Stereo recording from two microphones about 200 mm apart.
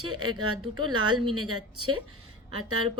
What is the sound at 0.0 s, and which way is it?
Speech, 90° right.